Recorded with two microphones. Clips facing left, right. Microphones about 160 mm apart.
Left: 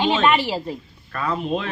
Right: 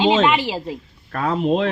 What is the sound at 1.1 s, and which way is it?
Speech, 70° right (ahead or behind).